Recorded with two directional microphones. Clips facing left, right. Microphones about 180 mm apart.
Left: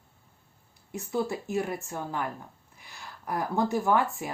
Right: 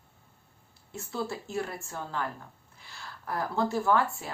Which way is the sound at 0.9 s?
15° left (ahead or behind).